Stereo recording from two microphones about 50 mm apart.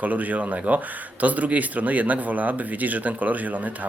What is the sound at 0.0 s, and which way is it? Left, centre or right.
Speech, right.